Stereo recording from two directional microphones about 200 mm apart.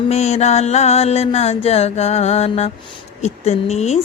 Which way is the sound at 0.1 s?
35° left (ahead or behind).